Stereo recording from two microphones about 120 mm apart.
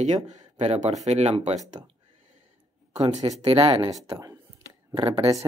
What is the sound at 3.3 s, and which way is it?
Speech, 55° right (ahead or behind).